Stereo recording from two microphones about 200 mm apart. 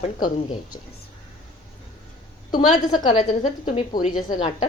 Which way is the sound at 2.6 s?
25° left (ahead or behind).